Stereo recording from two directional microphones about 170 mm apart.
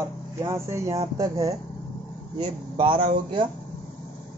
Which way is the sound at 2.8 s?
30° right (ahead or behind).